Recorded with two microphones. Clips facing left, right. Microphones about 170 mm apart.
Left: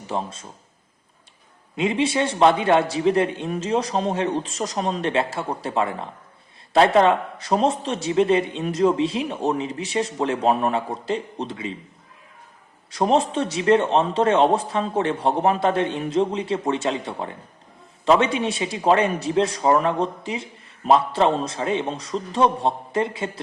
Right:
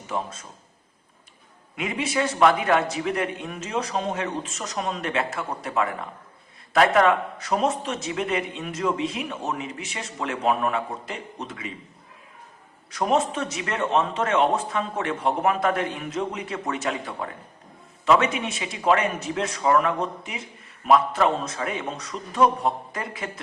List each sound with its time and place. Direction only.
0.1 s a man's voice: 30° left (ahead or behind)
1.7 s a man's voice: 30° left (ahead or behind)
12.9 s a man's voice: 30° left (ahead or behind)